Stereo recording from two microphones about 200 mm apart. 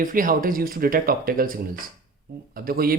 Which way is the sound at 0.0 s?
45° right (ahead or behind).